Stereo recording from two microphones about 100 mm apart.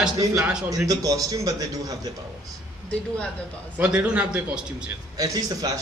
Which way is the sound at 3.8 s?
10° right (ahead or behind).